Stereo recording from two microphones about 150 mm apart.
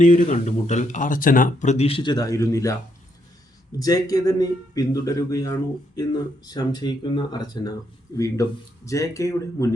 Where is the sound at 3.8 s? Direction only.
25° left (ahead or behind).